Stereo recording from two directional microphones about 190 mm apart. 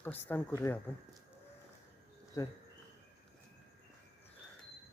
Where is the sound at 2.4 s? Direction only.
15° left (ahead or behind).